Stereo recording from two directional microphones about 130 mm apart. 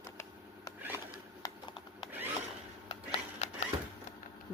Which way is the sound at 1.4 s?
40° left (ahead or behind).